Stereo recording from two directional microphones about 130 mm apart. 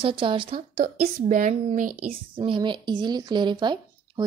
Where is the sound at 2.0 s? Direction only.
40° right (ahead or behind).